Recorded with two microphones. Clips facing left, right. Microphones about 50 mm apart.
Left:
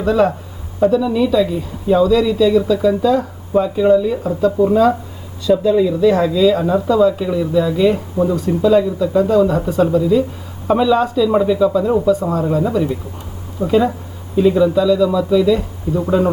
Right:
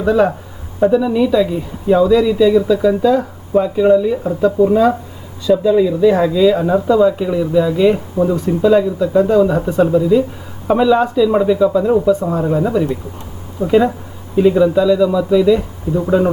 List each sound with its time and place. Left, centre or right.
0.0 s speech: centre